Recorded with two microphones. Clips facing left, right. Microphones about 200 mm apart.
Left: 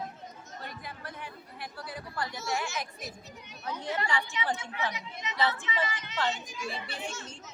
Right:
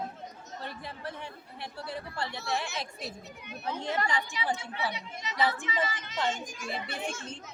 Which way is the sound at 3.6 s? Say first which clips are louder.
Right 2 dB; 25° right (ahead or behind).